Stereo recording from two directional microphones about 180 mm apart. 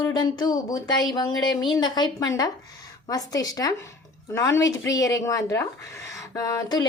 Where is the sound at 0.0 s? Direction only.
25° left (ahead or behind).